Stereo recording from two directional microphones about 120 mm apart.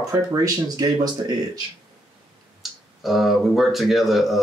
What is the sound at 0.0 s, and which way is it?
Speech, 30° right (ahead or behind).